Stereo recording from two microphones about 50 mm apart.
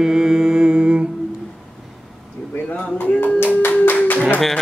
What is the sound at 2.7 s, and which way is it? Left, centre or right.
Music, left.